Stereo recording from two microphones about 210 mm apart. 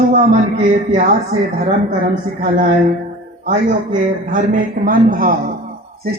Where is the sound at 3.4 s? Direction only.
40° right (ahead or behind).